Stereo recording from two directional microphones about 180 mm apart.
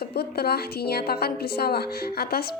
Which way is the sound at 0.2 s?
60° left (ahead or behind).